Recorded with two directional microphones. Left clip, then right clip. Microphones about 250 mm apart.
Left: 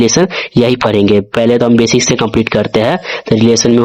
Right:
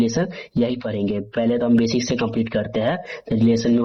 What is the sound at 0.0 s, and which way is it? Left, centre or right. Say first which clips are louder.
Speech: left 12 dB; left.